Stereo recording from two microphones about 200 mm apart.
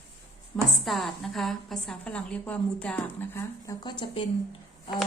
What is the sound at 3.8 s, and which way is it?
Speech, 25° left (ahead or behind).